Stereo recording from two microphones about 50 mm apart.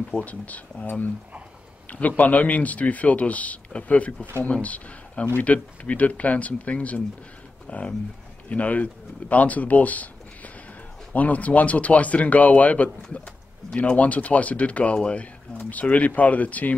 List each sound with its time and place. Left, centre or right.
0.2 s a man's voice: left